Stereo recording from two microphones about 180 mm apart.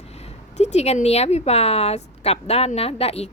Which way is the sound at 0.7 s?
35° left (ahead or behind).